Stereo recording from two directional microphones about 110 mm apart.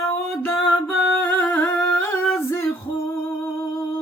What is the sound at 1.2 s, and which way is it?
Humming, 15° left (ahead or behind).